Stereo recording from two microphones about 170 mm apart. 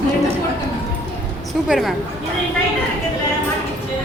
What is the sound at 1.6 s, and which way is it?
Speech, centre (ahead or behind).